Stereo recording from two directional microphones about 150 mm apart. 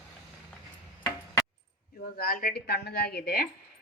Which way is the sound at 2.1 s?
85° left.